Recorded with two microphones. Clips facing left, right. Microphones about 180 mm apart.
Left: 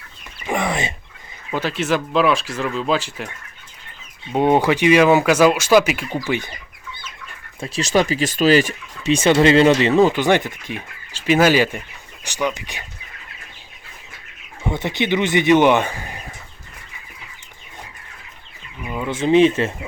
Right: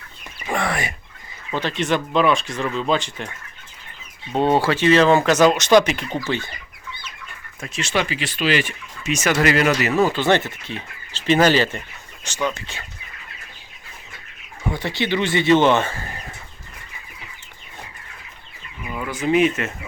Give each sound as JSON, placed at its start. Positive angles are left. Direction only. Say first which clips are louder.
{"t": 0.4, "sound": "a sound", "louder": "left 2 dB", "side_deg": 20}
{"t": 1.5, "sound": "speech", "louder": "left 1 dB", "side_deg": 5}
{"t": 4.3, "sound": "speech", "louder": "left 2 dB", "side_deg": 15}
{"t": 7.6, "sound": "speech", "louder": "left 5 dB", "side_deg": 35}
{"t": 10.0, "sound": "speech", "louder": "left 3 dB", "side_deg": 15}
{"t": 14.7, "sound": "speech", "louder": "left 2 dB", "side_deg": 20}
{"t": 18.9, "sound": "speech", "louder": "left 3 dB", "side_deg": 20}